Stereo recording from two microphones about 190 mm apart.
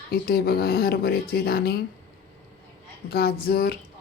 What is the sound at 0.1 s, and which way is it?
A woman's voice, 55° left (ahead or behind).